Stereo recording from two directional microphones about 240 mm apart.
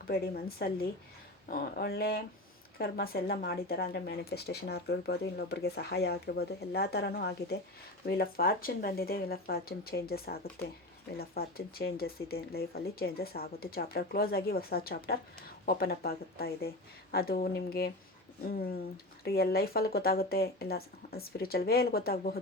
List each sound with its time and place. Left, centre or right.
0.1 s speech: left
19.2 s speech: left